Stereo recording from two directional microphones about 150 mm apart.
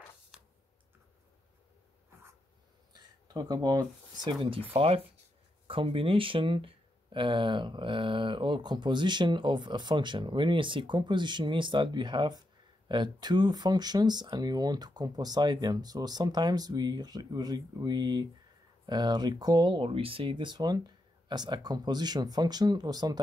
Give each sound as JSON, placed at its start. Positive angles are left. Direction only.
{"t": 2.9, "sound": "speech", "side_deg": -25}